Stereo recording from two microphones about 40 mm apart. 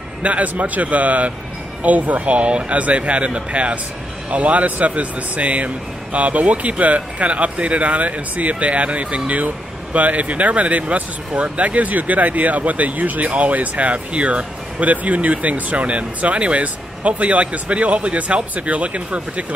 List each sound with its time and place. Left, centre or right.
0.2 s speech: right